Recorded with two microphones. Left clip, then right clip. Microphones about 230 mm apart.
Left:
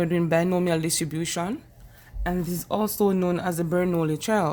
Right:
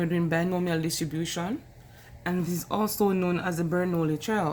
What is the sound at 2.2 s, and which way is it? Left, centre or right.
A man's voice, left.